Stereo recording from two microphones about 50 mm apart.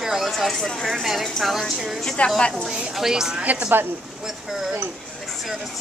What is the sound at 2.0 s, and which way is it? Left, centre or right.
Speech, centre.